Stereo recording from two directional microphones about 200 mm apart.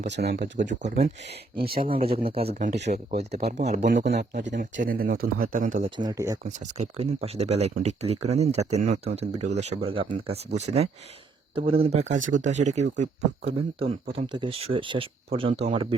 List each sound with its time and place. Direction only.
0.0 s speech: 55° right (ahead or behind)
0.8 s speech: 35° right (ahead or behind)
1.5 s speech: 50° right (ahead or behind)
1.8 s speech: 25° right (ahead or behind)
2.6 s speech: 55° right (ahead or behind)
3.1 s speech: 30° right (ahead or behind)
4.0 s speech: 55° right (ahead or behind)
6.1 s speech: 20° right (ahead or behind)
6.4 s speech: 35° right (ahead or behind)